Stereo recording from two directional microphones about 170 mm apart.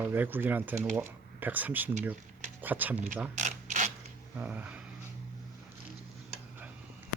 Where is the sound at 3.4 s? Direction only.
45° right (ahead or behind).